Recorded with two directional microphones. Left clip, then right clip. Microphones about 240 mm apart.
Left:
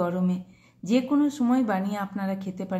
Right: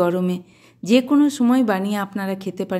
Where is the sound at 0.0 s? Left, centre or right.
Right.